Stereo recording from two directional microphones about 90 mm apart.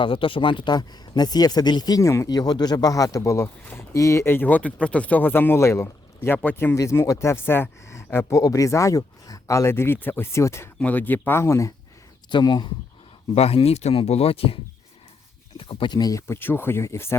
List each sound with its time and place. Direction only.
0.0 s speech: 75° left (ahead or behind); by 5.9 s 30° left (ahead or behind)
6.2 s speech: 20° left (ahead or behind)
6.7 s speech: 35° left (ahead or behind)
10.8 s speech: 20° left (ahead or behind)
12.3 s speech: 55° left (ahead or behind)
13.5 s speech: 90° left
15.5 s speech: 80° left
15.9 s speech: 45° left (ahead or behind)
16.2 s speech: 25° left (ahead or behind)